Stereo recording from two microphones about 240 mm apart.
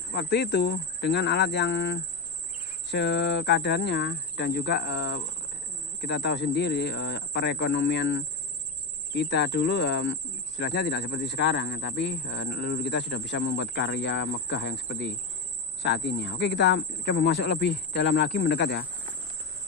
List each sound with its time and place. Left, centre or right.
0.1 s speech: left